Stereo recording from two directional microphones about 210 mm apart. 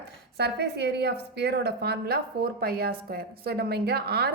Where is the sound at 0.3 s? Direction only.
55° right (ahead or behind).